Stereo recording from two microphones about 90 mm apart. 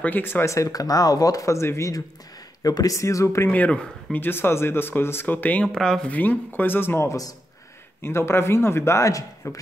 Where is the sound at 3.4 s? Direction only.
15° left (ahead or behind); by 7.3 s 40° left (ahead or behind).